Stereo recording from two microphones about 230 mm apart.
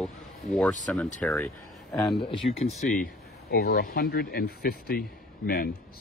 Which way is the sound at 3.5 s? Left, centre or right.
Left.